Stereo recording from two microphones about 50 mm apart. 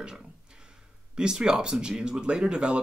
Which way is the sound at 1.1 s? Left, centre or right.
Centre.